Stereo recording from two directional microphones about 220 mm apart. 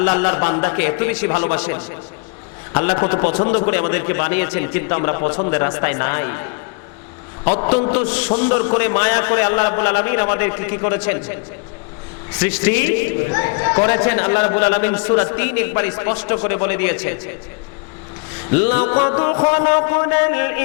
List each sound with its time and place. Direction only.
0.0 s a man's voice: 15° left (ahead or behind)
4.9 s music: 20° left (ahead or behind)
8.8 s a man's voice: 15° left (ahead or behind)
13.0 s speech: 55° left (ahead or behind)
13.2 s a man's voice: 20° left (ahead or behind)
18.5 s music: 25° left (ahead or behind)